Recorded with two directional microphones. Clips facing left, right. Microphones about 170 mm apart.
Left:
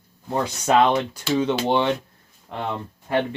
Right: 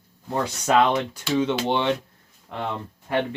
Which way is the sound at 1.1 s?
35° left (ahead or behind).